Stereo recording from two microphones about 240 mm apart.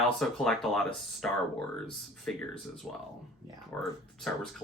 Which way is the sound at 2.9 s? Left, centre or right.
Centre.